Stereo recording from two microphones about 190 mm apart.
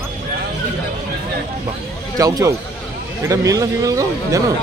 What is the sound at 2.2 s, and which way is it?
A man's voice, 20° right (ahead or behind).